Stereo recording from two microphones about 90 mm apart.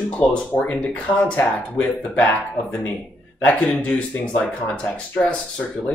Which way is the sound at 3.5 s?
5° left (ahead or behind).